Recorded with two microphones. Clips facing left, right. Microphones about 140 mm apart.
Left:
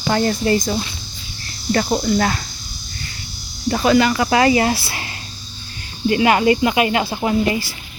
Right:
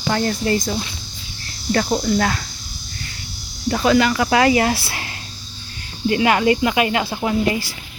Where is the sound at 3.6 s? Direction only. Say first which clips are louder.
Left 1 dB; 10° left (ahead or behind).